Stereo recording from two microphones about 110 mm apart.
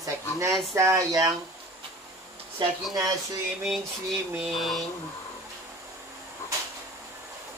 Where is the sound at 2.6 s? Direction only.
45° right (ahead or behind).